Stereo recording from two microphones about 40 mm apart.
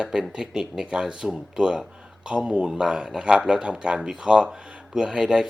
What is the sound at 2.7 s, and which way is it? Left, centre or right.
Speech, centre.